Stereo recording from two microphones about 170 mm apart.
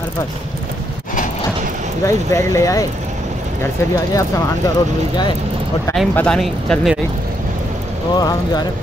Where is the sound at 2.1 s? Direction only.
15° left (ahead or behind).